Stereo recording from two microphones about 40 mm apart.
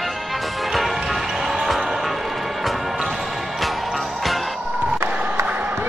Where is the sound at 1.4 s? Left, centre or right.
Centre.